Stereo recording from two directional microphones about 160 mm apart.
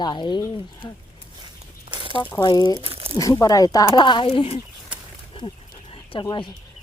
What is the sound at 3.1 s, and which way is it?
Speech, 25° left (ahead or behind).